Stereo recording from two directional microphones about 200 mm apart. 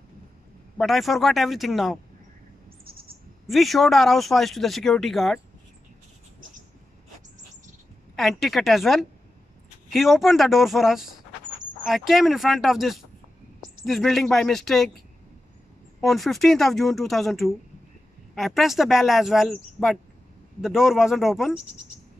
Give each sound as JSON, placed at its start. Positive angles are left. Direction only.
{"t": 0.7, "sound": "speech", "side_deg": 0}
{"t": 2.8, "sound": "bird", "side_deg": -50}
{"t": 3.4, "sound": "speech", "side_deg": 0}
{"t": 8.2, "sound": "speech", "side_deg": 0}
{"t": 16.0, "sound": "speech", "side_deg": 0}